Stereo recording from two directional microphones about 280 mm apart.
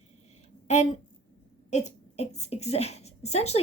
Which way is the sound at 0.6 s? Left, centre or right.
Left.